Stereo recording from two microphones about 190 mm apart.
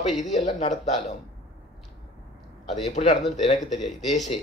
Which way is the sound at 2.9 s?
35° left (ahead or behind).